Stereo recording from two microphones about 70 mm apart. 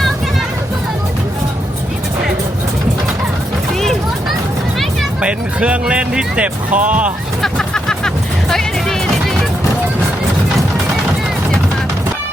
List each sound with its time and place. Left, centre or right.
3.8 s a sound: centre
5.2 s speech: centre
7.4 s music: centre